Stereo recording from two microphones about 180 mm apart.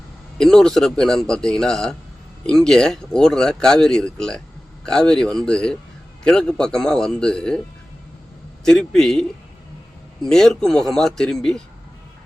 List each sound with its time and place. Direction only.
0.3 s speech: 5° left (ahead or behind)
8.6 s speech: 5° left (ahead or behind)
10.2 s speech: 5° left (ahead or behind)